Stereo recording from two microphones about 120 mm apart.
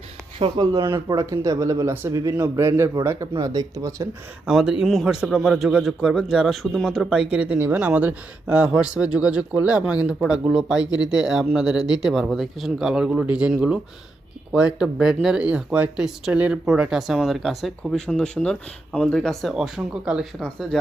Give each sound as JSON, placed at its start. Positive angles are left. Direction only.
{"t": 0.3, "sound": "speech", "side_deg": -50}
{"t": 0.6, "sound": "speech", "side_deg": -35}
{"t": 4.4, "sound": "a man's voice", "side_deg": -5}